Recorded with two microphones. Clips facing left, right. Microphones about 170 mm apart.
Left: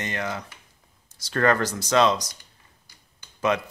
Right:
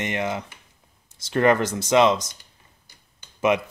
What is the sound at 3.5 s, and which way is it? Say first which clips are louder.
Speech: right 3 dB; 20° right (ahead or behind).